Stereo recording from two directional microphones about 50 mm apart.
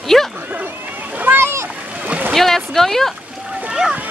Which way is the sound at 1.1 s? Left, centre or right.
Right.